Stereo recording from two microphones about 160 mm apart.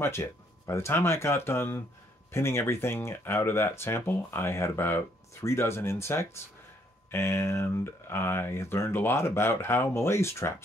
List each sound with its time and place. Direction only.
0.0 s speech: 15° left (ahead or behind)